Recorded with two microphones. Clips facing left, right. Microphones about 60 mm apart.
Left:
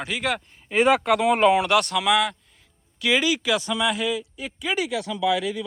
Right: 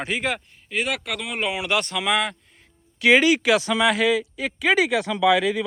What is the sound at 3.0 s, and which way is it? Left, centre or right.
Speech, right.